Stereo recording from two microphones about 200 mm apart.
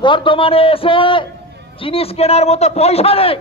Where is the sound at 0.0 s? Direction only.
25° left (ahead or behind).